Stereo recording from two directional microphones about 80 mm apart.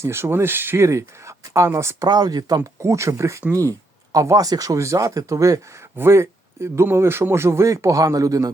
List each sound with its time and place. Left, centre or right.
0.0 s speech: right
2.0 s speech: right
2.6 s speech: right